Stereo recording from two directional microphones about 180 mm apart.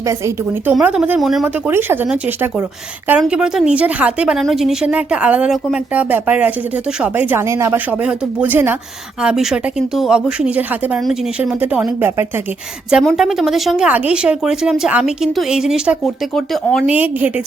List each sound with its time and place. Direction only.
0.1 s speech: 15° right (ahead or behind)
1.7 s speech: 10° right (ahead or behind)